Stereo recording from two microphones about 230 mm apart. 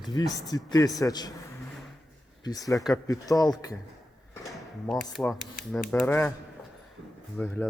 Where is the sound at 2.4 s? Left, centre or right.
Centre.